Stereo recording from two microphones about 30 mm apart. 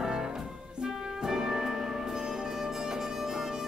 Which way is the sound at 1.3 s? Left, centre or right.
Centre.